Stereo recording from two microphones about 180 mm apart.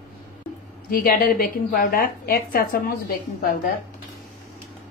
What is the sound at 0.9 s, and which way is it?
A woman's voice, 55° left (ahead or behind).